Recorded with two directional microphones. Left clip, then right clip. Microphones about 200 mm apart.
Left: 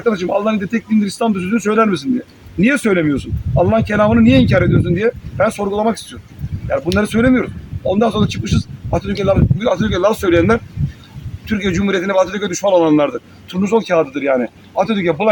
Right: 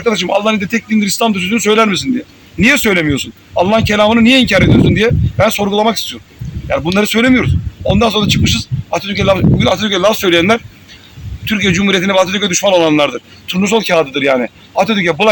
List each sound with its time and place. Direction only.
0.0 s a man's voice: 15° left (ahead or behind)